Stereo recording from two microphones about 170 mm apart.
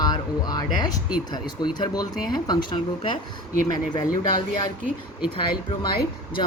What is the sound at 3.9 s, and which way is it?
Speech, 25° left (ahead or behind).